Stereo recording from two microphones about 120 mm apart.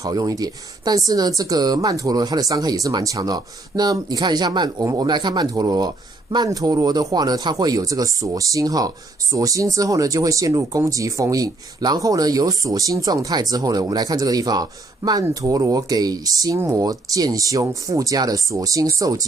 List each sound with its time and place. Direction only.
0.0 s speech: 30° right (ahead or behind)